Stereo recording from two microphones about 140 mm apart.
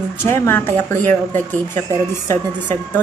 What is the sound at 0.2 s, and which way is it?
Speech, 15° left (ahead or behind).